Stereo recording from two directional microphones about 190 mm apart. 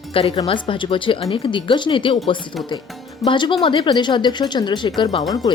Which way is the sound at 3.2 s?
25° left (ahead or behind).